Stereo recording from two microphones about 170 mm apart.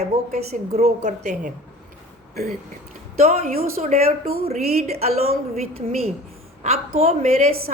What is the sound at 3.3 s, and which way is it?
A woman's voice, 40° right (ahead or behind).